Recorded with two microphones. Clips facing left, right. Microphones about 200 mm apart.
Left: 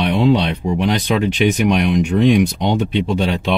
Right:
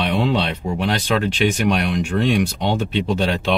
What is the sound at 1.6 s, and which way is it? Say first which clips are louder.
Speech: left 4 dB; 15° left (ahead or behind).